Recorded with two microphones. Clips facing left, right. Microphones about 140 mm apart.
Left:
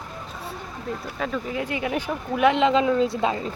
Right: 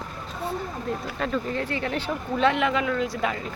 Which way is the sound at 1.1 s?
Centre (ahead or behind).